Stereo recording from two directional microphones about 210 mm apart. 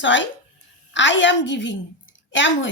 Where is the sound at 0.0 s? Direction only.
60° left (ahead or behind).